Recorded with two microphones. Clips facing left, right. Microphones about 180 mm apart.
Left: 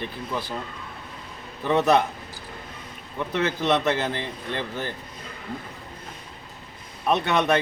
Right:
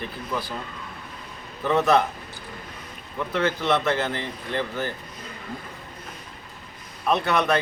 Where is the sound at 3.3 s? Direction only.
20° left (ahead or behind).